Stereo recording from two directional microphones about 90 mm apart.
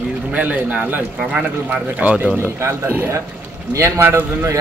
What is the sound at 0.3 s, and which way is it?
Speech, 15° right (ahead or behind).